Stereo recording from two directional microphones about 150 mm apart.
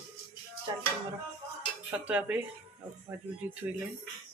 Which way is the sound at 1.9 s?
10° right (ahead or behind).